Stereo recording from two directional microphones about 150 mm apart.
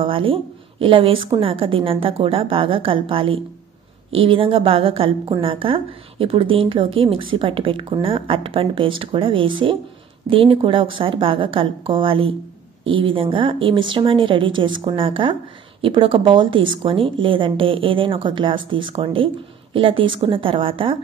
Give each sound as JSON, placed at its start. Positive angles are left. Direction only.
{"t": 0.0, "sound": "a woman's voice", "side_deg": -35}